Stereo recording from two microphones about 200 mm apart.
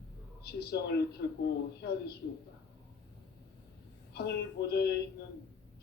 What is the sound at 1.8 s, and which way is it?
Speech, 55° left (ahead or behind).